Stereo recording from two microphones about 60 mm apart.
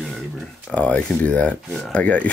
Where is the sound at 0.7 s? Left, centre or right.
Left.